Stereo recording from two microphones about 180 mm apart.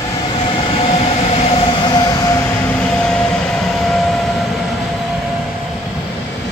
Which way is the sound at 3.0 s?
5° left (ahead or behind).